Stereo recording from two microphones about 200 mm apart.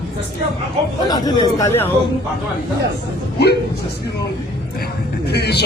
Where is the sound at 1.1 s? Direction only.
20° left (ahead or behind).